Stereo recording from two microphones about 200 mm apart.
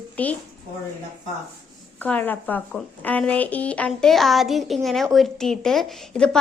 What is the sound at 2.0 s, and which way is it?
A woman's voice, 10° left (ahead or behind).